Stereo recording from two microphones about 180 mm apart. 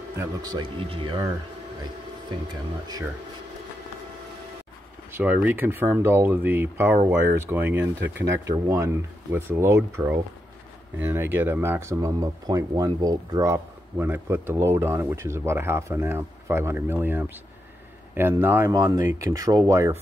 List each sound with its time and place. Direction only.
0.2 s speech: 25° right (ahead or behind)
5.1 s speech: 10° right (ahead or behind)
7.8 s speech: 85° right
8.3 s speech: 15° right (ahead or behind)